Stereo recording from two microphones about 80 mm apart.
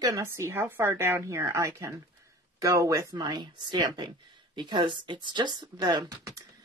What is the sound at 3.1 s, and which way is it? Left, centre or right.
Speech, right.